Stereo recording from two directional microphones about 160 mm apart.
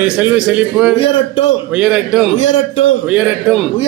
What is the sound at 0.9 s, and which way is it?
Speech, 35° left (ahead or behind).